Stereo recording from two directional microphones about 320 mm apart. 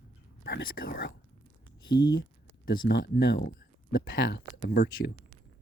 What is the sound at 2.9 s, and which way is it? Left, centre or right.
Speech, left.